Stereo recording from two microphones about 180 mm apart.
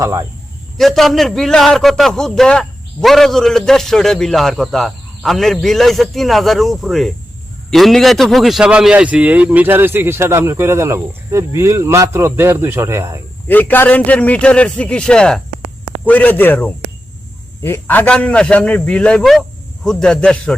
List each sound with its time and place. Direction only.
0.0 s speech: 20° right (ahead or behind)
0.8 s a man's voice: centre (ahead or behind); by 13.2 s 15° right (ahead or behind)
13.5 s a man's voice: 10° left (ahead or behind)